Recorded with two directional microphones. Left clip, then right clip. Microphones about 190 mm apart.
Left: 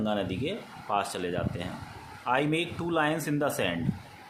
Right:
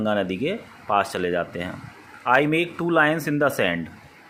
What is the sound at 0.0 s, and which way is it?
Speech, 25° right (ahead or behind).